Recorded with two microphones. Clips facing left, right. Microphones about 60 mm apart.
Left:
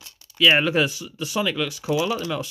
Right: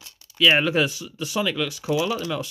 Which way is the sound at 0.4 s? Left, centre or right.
Centre.